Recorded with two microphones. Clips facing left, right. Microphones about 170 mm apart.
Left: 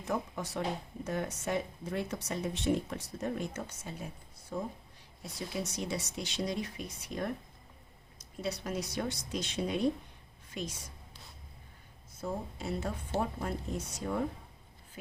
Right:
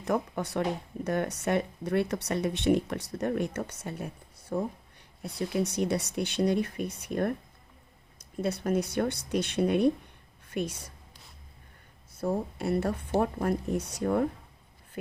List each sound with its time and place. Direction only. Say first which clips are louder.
0.0 s speech: right 6 dB; 65° right (ahead or behind)
12.2 s speech: right 7 dB; 60° right (ahead or behind)